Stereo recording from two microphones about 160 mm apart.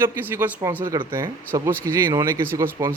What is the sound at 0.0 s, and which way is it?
Speech, 15° right (ahead or behind).